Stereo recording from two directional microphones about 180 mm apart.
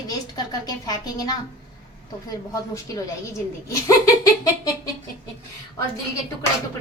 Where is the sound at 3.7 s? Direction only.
20° left (ahead or behind).